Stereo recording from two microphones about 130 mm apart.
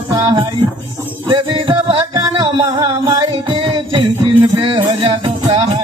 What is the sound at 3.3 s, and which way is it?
Music, 45° right (ahead or behind).